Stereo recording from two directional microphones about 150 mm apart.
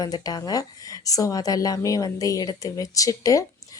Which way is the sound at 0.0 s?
25° left (ahead or behind).